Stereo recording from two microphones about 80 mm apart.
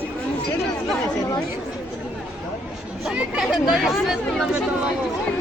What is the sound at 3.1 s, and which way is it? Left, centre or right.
Speech, centre.